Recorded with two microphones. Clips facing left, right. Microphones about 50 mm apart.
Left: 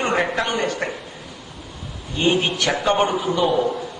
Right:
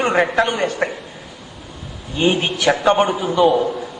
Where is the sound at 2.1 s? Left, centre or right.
Centre.